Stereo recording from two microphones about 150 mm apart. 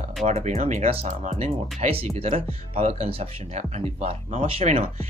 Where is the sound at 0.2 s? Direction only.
45° right (ahead or behind).